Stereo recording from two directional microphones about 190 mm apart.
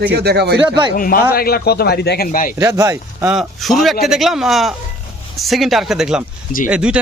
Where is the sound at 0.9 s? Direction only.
50° left (ahead or behind).